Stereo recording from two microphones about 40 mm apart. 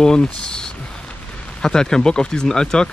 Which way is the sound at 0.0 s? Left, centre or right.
Centre.